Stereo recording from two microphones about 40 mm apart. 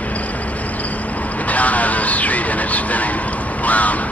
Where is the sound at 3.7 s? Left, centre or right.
Left.